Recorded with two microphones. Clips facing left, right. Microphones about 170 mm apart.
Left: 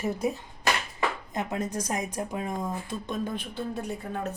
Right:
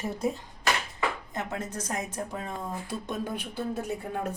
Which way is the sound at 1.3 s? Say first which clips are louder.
Left 3 dB; 15° left (ahead or behind).